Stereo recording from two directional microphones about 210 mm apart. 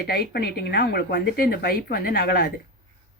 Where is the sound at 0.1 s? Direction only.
50° left (ahead or behind).